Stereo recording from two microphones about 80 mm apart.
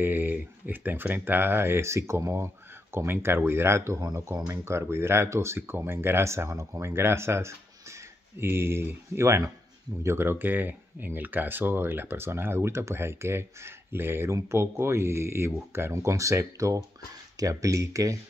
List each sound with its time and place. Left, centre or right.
0.0 s speech: right
14.3 s speech: right